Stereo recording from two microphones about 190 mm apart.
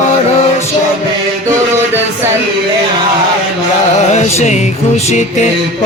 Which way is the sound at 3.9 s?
35° left (ahead or behind).